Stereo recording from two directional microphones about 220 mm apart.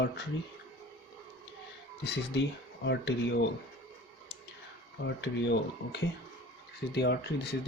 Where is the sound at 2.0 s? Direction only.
50° left (ahead or behind).